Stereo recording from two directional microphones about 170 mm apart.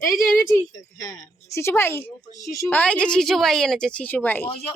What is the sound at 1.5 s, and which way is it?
A woman's voice, 15° left (ahead or behind).